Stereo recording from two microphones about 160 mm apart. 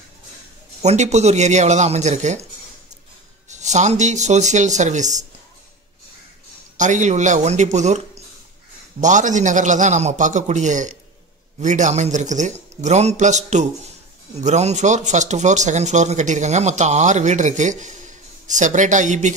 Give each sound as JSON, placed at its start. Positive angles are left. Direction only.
{"t": 0.8, "sound": "speech", "side_deg": -45}
{"t": 3.4, "sound": "speech", "side_deg": -45}
{"t": 6.8, "sound": "speech", "side_deg": -50}
{"t": 9.0, "sound": "speech", "side_deg": -50}